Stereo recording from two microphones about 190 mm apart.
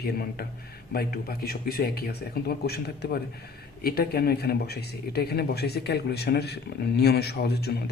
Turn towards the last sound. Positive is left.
turn(degrees=55)  # may be behind; listen again after turning